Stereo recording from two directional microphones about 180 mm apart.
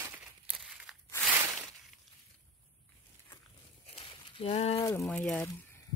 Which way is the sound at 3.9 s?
30° left (ahead or behind).